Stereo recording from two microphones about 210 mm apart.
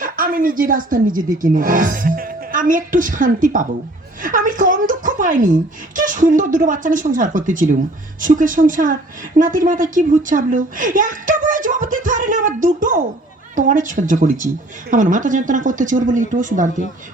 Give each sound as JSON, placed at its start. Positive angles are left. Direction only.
{"t": 0.0, "sound": "speech", "side_deg": -40}
{"t": 4.2, "sound": "a sound", "side_deg": -40}
{"t": 6.0, "sound": "a woman's voice", "side_deg": -40}